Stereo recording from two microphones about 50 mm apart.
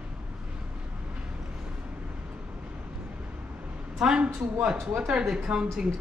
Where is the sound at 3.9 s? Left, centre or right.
Centre.